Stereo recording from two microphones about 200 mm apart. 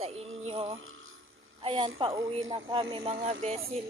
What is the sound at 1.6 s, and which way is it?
Speech, 20° right (ahead or behind).